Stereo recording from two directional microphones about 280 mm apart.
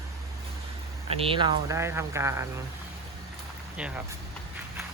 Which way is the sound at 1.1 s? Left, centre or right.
Centre.